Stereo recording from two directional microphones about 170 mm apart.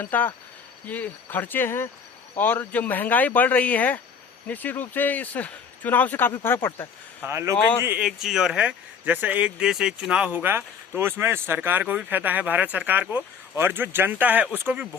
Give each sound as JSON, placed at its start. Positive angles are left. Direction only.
{"t": 0.0, "sound": "speech", "side_deg": 10}
{"t": 7.2, "sound": "speech", "side_deg": -15}